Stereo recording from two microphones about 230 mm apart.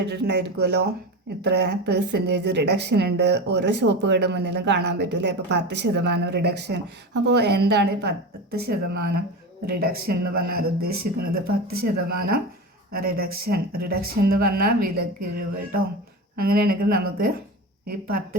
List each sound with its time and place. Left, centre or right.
0.0 s a woman's voice: right
12.9 s speech: right
16.4 s speech: right